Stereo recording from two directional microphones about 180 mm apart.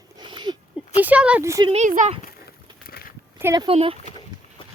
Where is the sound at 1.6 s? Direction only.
40° right (ahead or behind).